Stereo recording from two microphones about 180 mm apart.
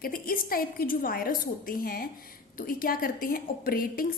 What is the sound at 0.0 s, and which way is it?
A woman's voice, 55° left (ahead or behind).